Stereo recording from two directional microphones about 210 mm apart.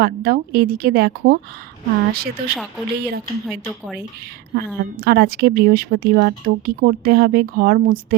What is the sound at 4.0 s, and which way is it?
Speech, 45° right (ahead or behind).